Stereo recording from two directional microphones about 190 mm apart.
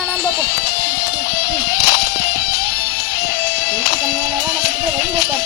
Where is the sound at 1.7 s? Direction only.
60° left (ahead or behind).